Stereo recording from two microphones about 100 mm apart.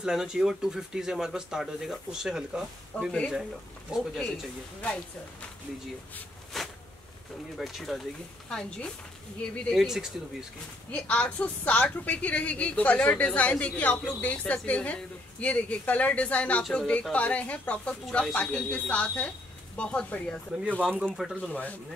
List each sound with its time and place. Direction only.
0.0 s speech: 5° right (ahead or behind)
3.1 s a woman's voice: 10° left (ahead or behind)
3.9 s speech: 5° right (ahead or behind)
6.5 s a sound: 5° left (ahead or behind)
7.5 s a woman's voice: centre (ahead or behind)
10.9 s a woman's voice: 15° left (ahead or behind)
20.6 s speech: 15° right (ahead or behind)